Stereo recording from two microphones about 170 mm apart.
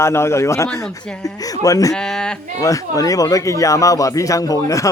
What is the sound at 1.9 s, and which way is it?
Speech, 5° left (ahead or behind).